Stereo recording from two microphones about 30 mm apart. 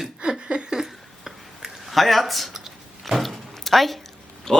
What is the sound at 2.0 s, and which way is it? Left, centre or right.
Speech, centre.